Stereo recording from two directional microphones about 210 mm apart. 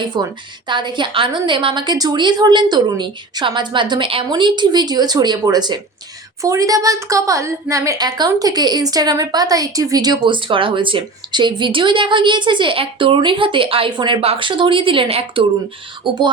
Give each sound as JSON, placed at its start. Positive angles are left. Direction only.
{"t": 0.0, "sound": "a woman's voice", "side_deg": -20}